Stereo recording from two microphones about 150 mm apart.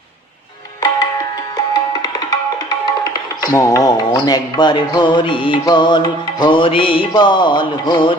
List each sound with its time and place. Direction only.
3.0 s music: 20° left (ahead or behind)